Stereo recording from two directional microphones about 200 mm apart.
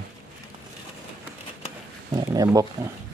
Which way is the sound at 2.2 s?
20° right (ahead or behind).